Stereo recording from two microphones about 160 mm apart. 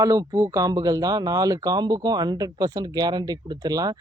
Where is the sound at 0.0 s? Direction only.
20° right (ahead or behind).